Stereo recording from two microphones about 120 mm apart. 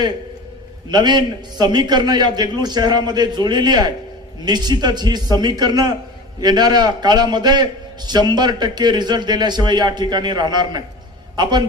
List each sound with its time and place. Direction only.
0.9 s a man's voice: 35° right (ahead or behind)